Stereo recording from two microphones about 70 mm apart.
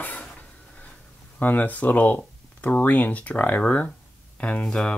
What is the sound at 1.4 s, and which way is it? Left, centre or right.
Speech, left.